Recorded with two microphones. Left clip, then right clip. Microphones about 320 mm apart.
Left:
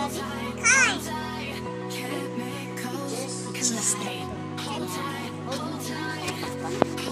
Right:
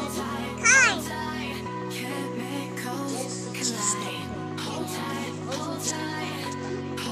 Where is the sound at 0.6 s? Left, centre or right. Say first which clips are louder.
Right 1 dB; left.